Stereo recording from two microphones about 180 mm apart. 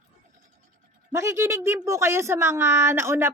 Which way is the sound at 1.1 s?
15° right (ahead or behind).